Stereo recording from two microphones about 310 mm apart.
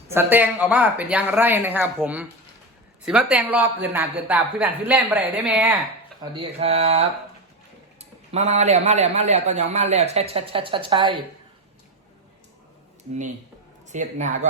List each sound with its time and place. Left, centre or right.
0.1 s speech: centre
6.3 s a man's voice: centre
13.9 s speech: right